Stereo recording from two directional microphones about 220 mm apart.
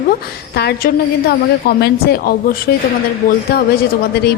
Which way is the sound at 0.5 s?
45° left (ahead or behind).